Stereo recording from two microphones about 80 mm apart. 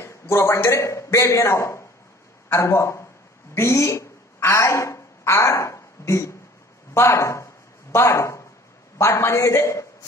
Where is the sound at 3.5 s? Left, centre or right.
Left.